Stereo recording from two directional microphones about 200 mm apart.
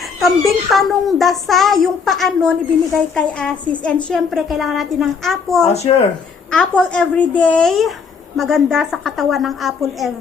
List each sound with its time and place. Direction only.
0.0 s a woman's voice: centre (ahead or behind)
5.6 s speech: 35° left (ahead or behind)
6.5 s a woman's voice: 5° left (ahead or behind)